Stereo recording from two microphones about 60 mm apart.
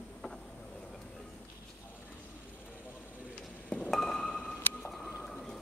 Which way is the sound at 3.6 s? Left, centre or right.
Left.